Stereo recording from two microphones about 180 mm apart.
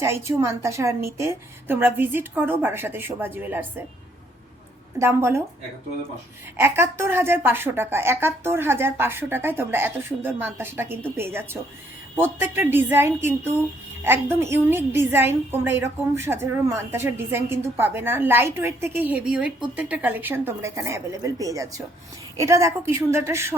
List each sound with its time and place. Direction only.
0.0 s a woman's voice: 15° right (ahead or behind)
4.9 s a woman's voice: 15° right (ahead or behind)
6.6 s a woman's voice: 15° right (ahead or behind)